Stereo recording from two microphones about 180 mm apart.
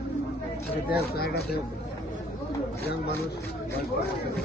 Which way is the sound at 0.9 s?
60° left (ahead or behind).